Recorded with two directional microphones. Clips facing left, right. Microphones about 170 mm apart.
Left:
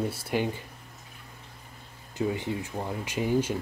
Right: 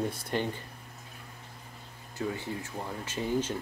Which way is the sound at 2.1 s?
20° left (ahead or behind).